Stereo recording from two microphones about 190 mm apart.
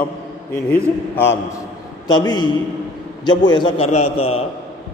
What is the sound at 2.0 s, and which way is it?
A man's voice, 20° left (ahead or behind).